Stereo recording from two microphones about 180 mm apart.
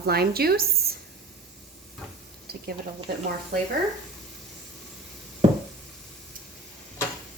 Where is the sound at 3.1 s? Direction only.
60° right (ahead or behind).